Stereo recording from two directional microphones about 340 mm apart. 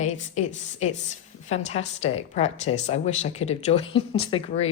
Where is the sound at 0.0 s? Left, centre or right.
Centre.